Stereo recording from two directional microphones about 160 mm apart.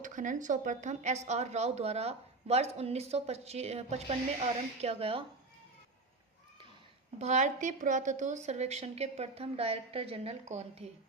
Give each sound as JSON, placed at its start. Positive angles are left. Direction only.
{"t": 0.0, "sound": "speech", "side_deg": -55}
{"t": 7.2, "sound": "speech", "side_deg": -45}